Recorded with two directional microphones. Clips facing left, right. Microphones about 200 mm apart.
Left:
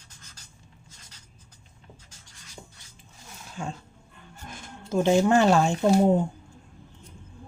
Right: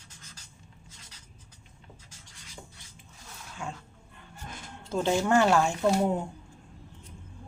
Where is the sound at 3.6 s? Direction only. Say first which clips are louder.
Left 4 dB; 35° left (ahead or behind).